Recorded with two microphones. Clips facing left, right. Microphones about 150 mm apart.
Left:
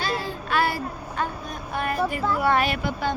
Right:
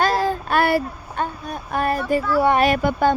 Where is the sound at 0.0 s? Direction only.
45° right (ahead or behind).